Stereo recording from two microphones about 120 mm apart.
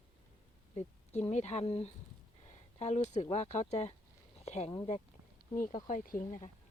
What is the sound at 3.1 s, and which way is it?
Speech, 70° left (ahead or behind).